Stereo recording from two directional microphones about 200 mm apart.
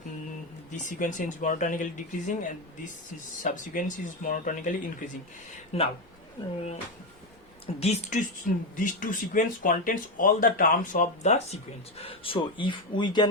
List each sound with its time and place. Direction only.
0.9 s speech: 40° left (ahead or behind)
7.8 s speech: 30° left (ahead or behind)